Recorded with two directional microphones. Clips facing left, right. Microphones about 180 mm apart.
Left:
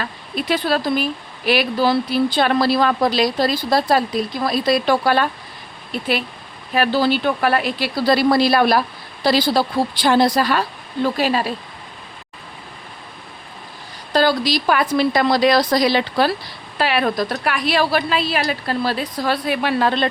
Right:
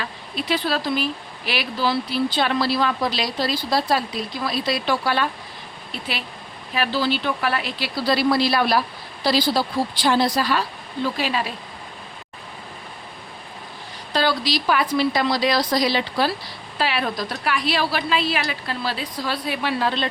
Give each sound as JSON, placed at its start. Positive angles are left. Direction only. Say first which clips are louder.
{"t": 0.0, "sound": "a woman's voice", "louder": "left 4 dB", "side_deg": 50}
{"t": 6.7, "sound": "a woman's voice", "louder": "left 5 dB", "side_deg": 50}
{"t": 14.1, "sound": "a woman's voice", "louder": "left 5 dB", "side_deg": 45}